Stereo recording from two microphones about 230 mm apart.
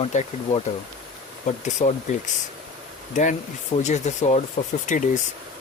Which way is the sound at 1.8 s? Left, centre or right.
Left.